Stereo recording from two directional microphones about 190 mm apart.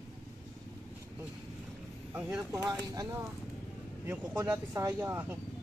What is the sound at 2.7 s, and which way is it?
Speech, 20° right (ahead or behind).